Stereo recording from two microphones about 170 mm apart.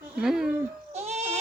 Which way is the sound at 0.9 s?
40° right (ahead or behind).